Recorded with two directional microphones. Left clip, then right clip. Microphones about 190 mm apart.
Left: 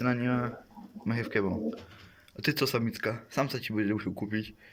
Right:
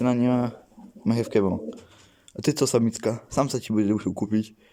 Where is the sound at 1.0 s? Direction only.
25° right (ahead or behind).